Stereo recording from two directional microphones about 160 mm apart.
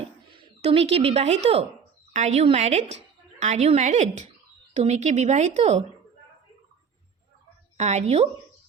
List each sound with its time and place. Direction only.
0.0 s a woman's voice: 40° right (ahead or behind)
7.8 s a woman's voice: 45° right (ahead or behind)